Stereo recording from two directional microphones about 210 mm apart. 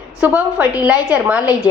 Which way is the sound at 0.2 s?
5° right (ahead or behind).